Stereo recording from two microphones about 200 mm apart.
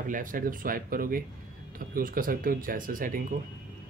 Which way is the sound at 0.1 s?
40° right (ahead or behind).